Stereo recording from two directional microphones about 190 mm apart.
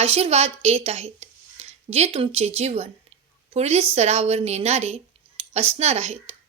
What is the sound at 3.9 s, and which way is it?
Speech, 35° right (ahead or behind).